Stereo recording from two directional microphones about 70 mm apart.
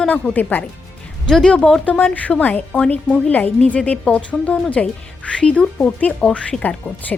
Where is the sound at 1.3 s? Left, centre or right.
Centre.